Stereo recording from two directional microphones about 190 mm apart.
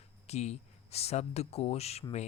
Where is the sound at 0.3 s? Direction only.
35° left (ahead or behind).